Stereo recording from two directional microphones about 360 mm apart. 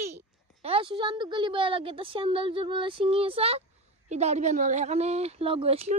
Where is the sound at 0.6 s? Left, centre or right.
Centre.